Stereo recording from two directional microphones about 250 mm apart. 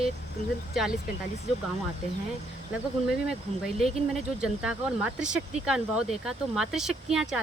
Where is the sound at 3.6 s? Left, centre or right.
Centre.